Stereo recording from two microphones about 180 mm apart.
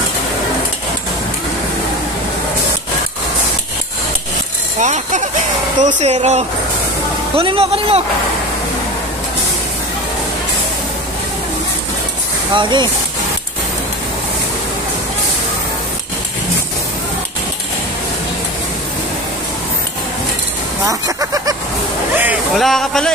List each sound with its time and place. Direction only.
4.7 s speech: 40° right (ahead or behind)
12.5 s speech: 25° right (ahead or behind)
20.8 s a sound: 20° right (ahead or behind)
22.2 s music: 10° right (ahead or behind)
22.7 s speech: 5° left (ahead or behind)